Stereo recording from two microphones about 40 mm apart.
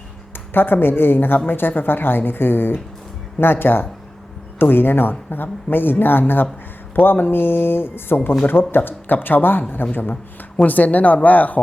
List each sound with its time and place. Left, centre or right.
0.5 s speech: left
10.6 s speech: left